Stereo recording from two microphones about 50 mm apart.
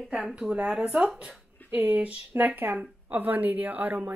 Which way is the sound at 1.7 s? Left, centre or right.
Right.